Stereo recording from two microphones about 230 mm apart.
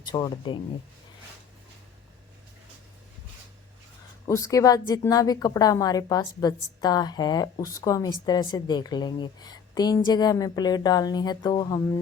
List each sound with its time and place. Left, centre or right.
0.0 s a woman's voice: centre
4.3 s a woman's voice: centre